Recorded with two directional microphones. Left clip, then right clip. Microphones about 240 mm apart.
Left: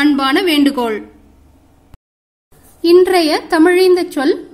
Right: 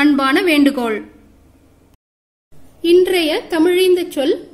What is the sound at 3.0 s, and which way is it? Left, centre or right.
Speech, centre.